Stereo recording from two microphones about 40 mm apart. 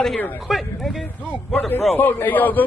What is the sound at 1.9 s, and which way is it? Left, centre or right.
Speech, left.